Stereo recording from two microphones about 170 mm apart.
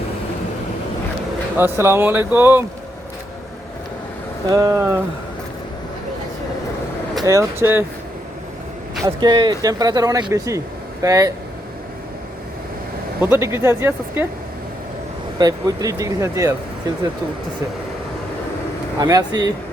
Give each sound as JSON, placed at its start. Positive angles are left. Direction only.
{"t": 1.5, "sound": "speech", "side_deg": -15}
{"t": 4.4, "sound": "speech", "side_deg": -20}
{"t": 7.3, "sound": "speech", "side_deg": -15}
{"t": 9.0, "sound": "speech", "side_deg": -25}
{"t": 13.2, "sound": "speech", "side_deg": -15}
{"t": 15.4, "sound": "speech", "side_deg": -20}
{"t": 18.9, "sound": "speech", "side_deg": -20}